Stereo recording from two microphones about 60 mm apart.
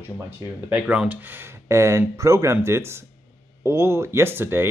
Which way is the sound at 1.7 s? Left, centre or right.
Right.